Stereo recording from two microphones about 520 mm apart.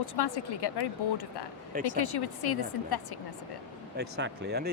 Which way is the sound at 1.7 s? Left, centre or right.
Centre.